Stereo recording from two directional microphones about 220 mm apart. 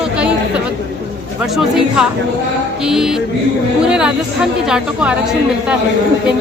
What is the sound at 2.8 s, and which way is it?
A woman's voice, centre (ahead or behind).